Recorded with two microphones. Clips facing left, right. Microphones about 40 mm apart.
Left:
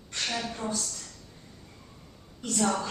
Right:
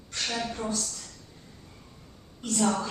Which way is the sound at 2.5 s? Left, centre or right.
Centre.